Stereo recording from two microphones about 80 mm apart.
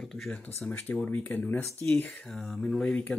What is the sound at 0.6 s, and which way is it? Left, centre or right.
Speech, centre.